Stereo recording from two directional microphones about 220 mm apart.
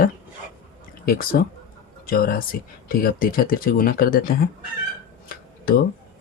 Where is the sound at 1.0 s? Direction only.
40° left (ahead or behind).